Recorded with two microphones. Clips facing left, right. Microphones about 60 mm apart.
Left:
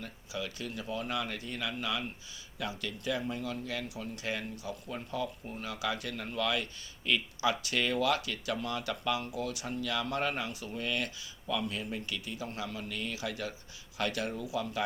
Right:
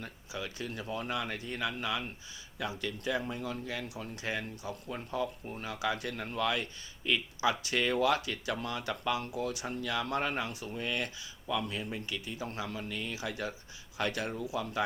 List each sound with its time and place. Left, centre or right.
0.0 s speech: right